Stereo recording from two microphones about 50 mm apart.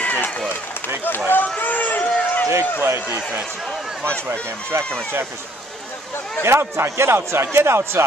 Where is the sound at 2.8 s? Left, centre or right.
Right.